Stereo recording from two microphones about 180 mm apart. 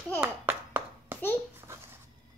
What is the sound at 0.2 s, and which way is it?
Clapping, 10° right (ahead or behind).